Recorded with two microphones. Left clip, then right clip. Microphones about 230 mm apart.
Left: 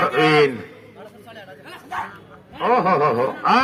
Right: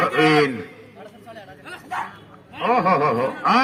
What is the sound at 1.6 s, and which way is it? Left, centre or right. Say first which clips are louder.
Dog: even; centre.